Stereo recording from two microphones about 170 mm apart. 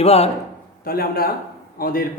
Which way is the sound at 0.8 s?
60° left (ahead or behind).